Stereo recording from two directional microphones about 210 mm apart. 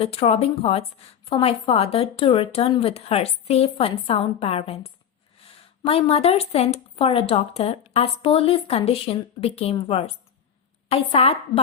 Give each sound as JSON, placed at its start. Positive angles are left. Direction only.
{"t": 0.0, "sound": "a woman's voice", "side_deg": 30}